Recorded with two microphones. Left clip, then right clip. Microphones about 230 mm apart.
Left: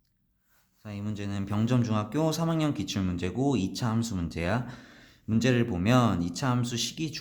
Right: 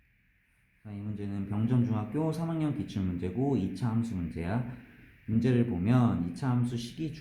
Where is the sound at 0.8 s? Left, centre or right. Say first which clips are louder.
Left 4 dB; left.